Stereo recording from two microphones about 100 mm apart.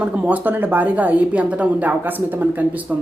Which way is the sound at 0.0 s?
15° right (ahead or behind).